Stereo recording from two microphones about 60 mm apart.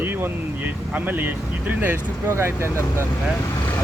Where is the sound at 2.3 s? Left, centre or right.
Right.